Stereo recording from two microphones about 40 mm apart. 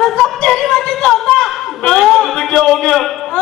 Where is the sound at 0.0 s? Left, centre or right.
Centre.